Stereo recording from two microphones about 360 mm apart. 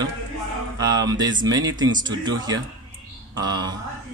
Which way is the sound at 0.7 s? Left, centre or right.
Centre.